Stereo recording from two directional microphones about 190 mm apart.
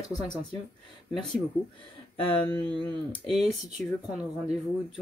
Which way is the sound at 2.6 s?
25° right (ahead or behind).